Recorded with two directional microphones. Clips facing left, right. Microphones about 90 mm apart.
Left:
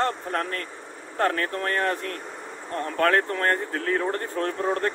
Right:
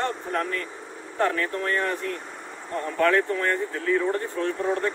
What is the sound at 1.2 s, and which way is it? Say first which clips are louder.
Speech: even; 50° left (ahead or behind).